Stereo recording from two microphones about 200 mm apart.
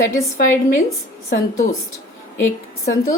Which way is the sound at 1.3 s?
40° left (ahead or behind).